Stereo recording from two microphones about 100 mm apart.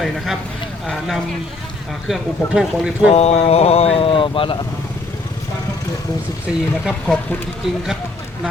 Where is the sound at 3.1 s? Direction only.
90° left; by 4.6 s 60° left (ahead or behind).